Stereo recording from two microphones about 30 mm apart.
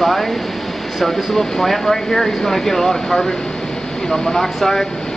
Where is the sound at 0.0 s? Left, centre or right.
Centre.